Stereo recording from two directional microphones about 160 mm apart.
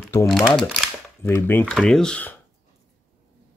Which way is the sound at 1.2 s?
15° left (ahead or behind).